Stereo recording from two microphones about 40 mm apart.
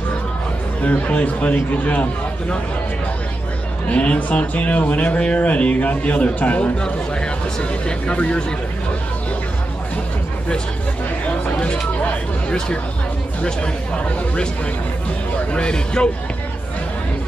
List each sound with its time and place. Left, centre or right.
0.8 s speech: left
3.9 s speech: left
7.8 s speech: left
11.6 s hubbub: left
13.4 s speech: left
15.5 s speech: left